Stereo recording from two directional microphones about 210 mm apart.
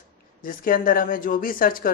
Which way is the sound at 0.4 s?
40° left (ahead or behind).